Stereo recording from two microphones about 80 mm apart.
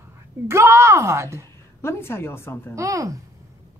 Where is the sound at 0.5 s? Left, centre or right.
Right.